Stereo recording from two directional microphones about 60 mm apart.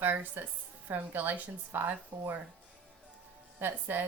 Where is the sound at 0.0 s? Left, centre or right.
Right.